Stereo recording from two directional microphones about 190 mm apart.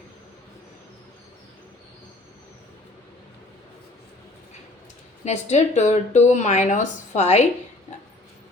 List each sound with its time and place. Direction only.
5.2 s speech: 35° left (ahead or behind)